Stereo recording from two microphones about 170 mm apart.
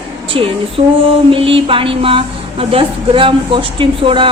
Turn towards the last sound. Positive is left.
turn(degrees=-30)  # may be behind; listen again after turning